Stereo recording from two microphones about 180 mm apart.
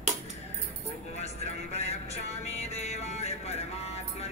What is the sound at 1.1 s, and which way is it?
Music, 35° left (ahead or behind).